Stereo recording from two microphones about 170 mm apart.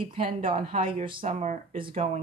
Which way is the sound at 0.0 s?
30° right (ahead or behind).